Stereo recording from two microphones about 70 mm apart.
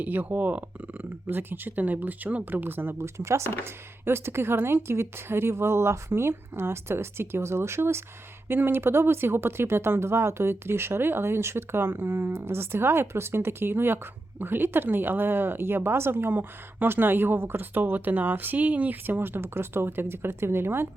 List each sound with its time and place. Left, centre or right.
0.0 s speech: right